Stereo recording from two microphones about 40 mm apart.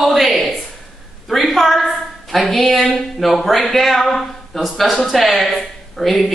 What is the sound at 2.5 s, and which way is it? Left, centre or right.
Speech, centre.